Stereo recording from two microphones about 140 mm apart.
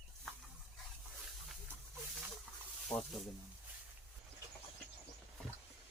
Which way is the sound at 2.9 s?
5° left (ahead or behind).